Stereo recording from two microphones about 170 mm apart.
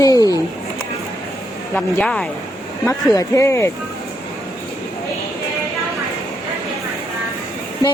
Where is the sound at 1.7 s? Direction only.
5° left (ahead or behind).